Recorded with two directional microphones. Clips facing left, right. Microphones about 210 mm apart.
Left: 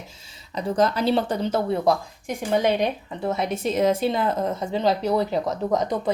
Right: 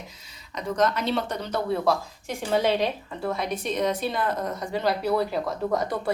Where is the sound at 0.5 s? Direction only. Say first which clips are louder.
Left 3 dB; 30° left (ahead or behind).